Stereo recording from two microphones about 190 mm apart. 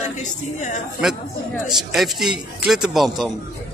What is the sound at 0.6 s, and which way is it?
Speech, 40° left (ahead or behind).